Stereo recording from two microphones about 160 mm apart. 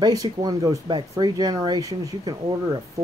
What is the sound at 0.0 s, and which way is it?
Speech, 25° right (ahead or behind).